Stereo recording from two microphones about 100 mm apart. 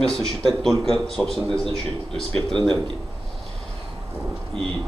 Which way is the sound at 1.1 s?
5° left (ahead or behind).